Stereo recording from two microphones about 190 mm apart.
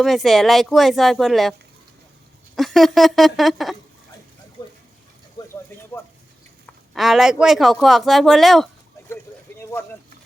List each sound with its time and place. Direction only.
0.0 s a man's voice: centre (ahead or behind)
2.6 s a man's voice: centre (ahead or behind)
4.6 s water: 25° left (ahead or behind)
6.7 s a man's voice: centre (ahead or behind)
9.6 s a sound: 15° left (ahead or behind)